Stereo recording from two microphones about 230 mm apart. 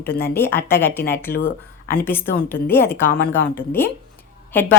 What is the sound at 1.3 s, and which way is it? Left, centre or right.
Speech, left.